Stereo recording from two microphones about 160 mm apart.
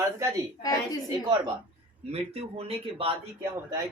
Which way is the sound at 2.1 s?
40° right (ahead or behind).